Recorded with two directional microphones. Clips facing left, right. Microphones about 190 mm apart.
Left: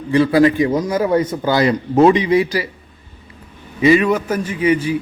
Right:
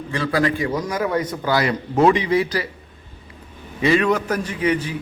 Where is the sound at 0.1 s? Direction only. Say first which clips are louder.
Left 8 dB; 15° left (ahead or behind).